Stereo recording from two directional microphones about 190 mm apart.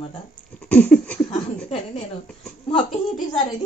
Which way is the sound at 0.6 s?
10° left (ahead or behind).